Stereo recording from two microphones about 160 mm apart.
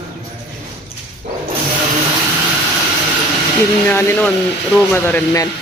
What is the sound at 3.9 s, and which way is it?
Speech, 15° left (ahead or behind).